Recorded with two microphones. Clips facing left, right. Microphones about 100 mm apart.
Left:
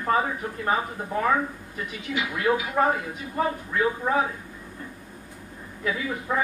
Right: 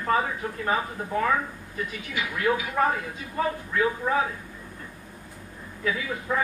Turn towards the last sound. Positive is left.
turn(degrees=15)  # may be behind; listen again after turning